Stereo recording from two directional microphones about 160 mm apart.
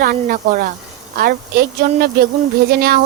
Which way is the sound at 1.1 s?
70° right (ahead or behind).